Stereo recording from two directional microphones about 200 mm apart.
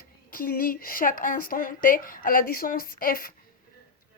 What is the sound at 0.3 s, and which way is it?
Speech, 45° left (ahead or behind).